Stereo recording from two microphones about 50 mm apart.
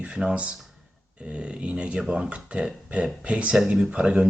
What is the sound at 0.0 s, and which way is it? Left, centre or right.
Speech, centre.